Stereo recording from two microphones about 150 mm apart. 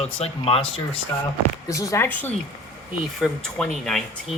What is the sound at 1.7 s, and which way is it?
Speech, 20° left (ahead or behind).